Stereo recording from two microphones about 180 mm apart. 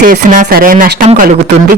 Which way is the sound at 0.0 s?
50° right (ahead or behind).